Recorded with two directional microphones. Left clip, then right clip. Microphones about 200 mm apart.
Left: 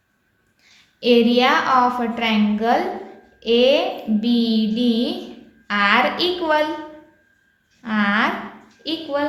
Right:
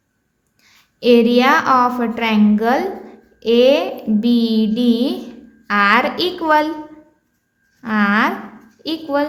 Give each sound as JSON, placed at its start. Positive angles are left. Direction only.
{"t": 0.6, "sound": "a woman's voice", "side_deg": -50}
{"t": 7.8, "sound": "a woman's voice", "side_deg": -50}